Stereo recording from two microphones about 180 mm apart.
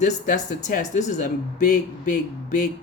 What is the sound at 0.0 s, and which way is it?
Speech, 45° left (ahead or behind).